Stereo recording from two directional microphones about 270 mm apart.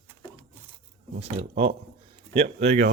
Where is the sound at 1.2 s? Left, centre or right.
Right.